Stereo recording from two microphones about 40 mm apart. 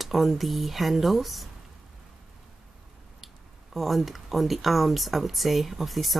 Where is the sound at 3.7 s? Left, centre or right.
Centre.